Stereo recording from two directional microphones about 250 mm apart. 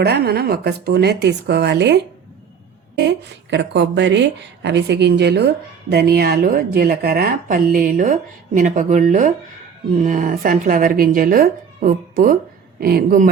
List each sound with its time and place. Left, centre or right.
0.0 s speech: right
3.0 s speech: right